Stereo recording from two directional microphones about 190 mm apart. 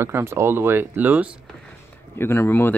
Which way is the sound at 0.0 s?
10° right (ahead or behind).